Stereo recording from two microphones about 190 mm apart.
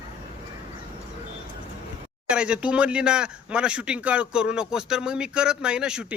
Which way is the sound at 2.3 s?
5° right (ahead or behind).